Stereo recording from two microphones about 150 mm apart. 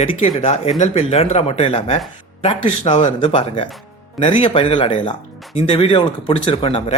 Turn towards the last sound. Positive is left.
turn(degrees=40)  # may be behind; listen again after turning